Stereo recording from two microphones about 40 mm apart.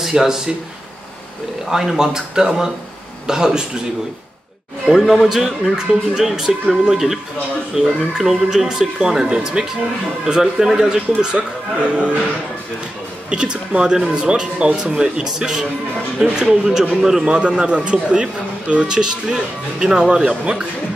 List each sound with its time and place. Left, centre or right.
0.0 s speech: centre
1.7 s speech: centre
4.9 s speech: centre
11.9 s speech: right
13.3 s speech: right
17.2 s speech: right